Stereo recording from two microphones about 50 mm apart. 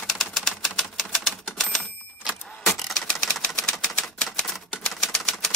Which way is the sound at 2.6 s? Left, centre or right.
Centre.